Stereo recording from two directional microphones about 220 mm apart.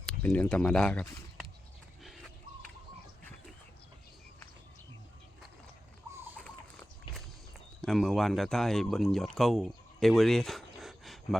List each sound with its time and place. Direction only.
0.0 s speech: 5° left (ahead or behind)
6.3 s bird: 5° left (ahead or behind)
7.8 s speech: centre (ahead or behind)